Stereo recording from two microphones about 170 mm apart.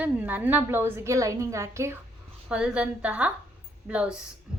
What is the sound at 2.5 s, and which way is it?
A woman's voice, 5° right (ahead or behind).